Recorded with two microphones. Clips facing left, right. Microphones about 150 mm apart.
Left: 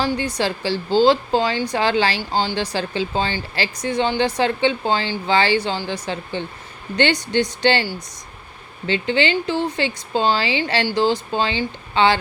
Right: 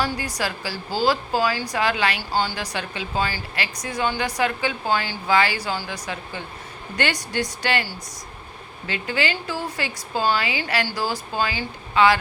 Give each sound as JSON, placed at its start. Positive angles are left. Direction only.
{"t": 0.0, "sound": "a woman's voice", "side_deg": 25}
{"t": 8.9, "sound": "a woman's voice", "side_deg": 25}